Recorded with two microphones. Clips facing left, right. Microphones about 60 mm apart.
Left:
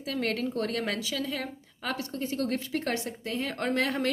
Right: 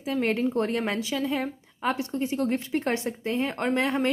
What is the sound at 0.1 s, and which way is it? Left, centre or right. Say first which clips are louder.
A woman's voice: right 5 dB; right.